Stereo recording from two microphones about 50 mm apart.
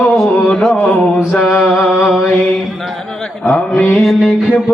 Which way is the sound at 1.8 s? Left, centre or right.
Centre.